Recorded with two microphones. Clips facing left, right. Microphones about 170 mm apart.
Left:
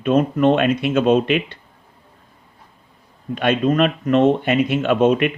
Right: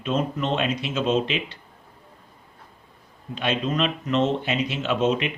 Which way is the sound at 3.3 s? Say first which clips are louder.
Left 8 dB; 55° left (ahead or behind).